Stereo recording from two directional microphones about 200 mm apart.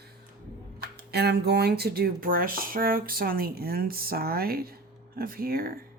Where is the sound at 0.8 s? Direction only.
55° right (ahead or behind).